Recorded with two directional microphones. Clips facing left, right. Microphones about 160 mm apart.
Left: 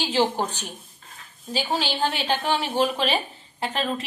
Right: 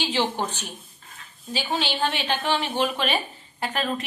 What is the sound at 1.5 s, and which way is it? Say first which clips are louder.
A woman's voice: left 1 dB; 40° left (ahead or behind).